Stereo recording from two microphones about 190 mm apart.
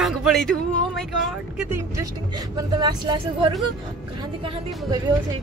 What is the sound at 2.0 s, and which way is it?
Speech, 20° right (ahead or behind).